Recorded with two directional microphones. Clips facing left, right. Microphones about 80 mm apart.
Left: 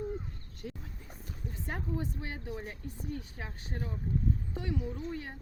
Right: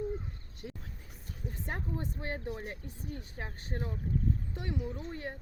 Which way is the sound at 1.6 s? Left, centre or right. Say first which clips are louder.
Left 2 dB; right.